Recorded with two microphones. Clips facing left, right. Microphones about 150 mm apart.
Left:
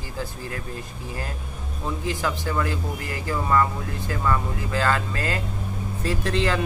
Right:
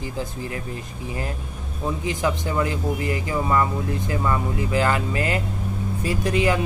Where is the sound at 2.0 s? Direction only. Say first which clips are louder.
Right 2 dB; 20° right (ahead or behind).